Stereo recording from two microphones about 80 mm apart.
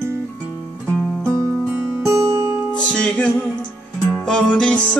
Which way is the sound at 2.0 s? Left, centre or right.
Right.